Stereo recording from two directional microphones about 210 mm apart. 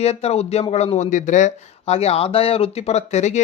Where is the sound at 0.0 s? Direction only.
30° left (ahead or behind).